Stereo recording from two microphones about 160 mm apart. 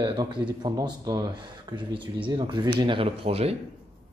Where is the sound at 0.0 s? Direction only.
30° right (ahead or behind).